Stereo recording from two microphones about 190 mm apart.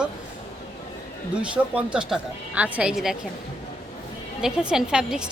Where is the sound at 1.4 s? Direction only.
5° right (ahead or behind).